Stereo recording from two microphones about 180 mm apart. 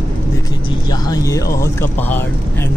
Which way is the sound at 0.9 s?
20° left (ahead or behind).